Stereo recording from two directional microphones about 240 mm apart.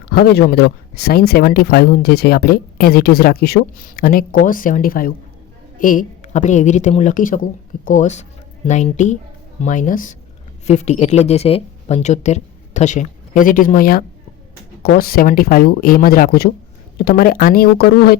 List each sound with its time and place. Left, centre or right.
0.1 s speech: left